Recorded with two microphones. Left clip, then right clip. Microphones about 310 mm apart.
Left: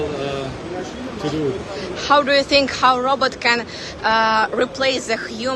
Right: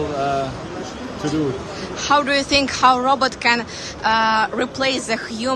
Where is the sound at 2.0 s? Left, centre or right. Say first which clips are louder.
Left 2 dB; centre.